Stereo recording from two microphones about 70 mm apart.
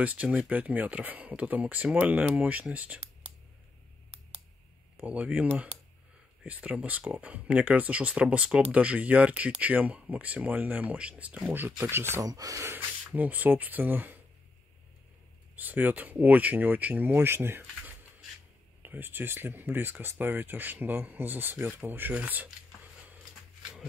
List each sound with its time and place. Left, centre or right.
0.0 s speech: right
5.0 s speech: right
12.2 s speech: right
12.6 s speech: right
15.5 s speech: right